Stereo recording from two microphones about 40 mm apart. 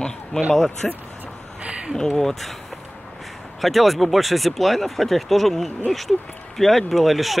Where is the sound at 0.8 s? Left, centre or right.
Centre.